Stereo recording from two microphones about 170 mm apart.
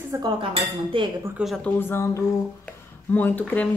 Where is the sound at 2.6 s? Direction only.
10° left (ahead or behind).